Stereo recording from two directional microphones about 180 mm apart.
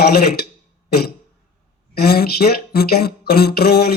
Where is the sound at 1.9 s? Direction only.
60° left (ahead or behind).